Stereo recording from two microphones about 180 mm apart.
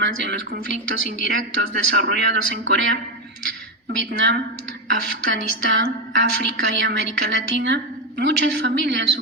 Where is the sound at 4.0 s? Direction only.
85° right.